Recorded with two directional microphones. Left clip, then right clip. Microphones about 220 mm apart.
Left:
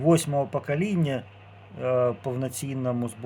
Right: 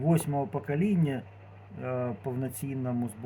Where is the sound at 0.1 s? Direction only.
30° left (ahead or behind).